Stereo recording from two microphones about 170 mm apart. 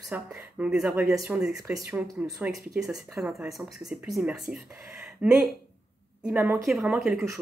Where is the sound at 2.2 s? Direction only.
10° right (ahead or behind).